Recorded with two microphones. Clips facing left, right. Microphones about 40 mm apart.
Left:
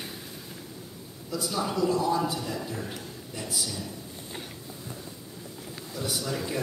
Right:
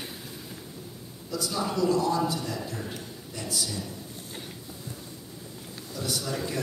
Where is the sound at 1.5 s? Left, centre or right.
Centre.